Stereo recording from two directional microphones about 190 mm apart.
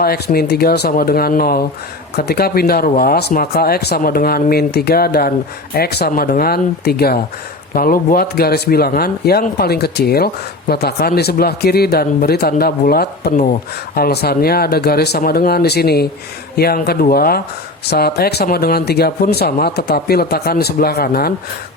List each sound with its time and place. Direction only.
0.0 s speech: 55° left (ahead or behind)